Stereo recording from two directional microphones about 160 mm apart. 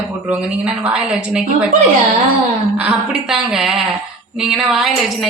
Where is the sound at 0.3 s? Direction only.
10° right (ahead or behind).